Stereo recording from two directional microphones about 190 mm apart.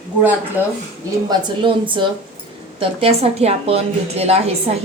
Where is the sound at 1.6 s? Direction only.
25° right (ahead or behind).